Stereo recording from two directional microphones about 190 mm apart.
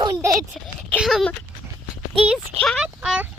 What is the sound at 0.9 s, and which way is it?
A child's voice, centre (ahead or behind).